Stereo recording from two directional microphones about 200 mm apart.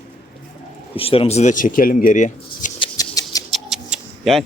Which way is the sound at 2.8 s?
15° left (ahead or behind).